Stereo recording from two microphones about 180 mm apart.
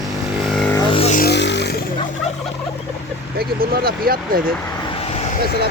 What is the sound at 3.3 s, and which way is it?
Speech, 60° right (ahead or behind).